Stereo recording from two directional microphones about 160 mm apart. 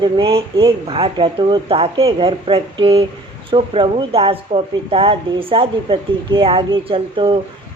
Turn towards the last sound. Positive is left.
turn(degrees=-30)  # may be behind; listen again after turning